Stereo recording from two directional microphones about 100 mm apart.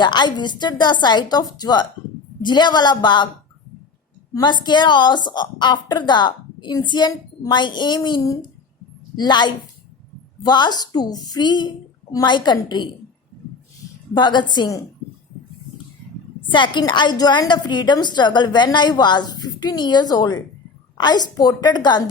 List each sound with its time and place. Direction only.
0.0 s a woman's voice: 50° left (ahead or behind)
4.4 s a woman's voice: 50° left (ahead or behind)
14.1 s a woman's voice: 50° left (ahead or behind)
16.5 s a woman's voice: 50° left (ahead or behind)